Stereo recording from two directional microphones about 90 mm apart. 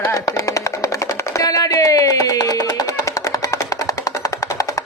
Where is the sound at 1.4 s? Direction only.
45° left (ahead or behind).